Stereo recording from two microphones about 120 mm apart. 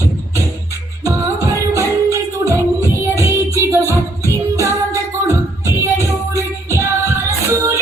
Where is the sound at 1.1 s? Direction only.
25° right (ahead or behind).